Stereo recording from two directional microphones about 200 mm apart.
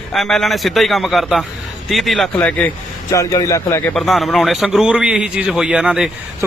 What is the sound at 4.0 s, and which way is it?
A man's voice, centre (ahead or behind).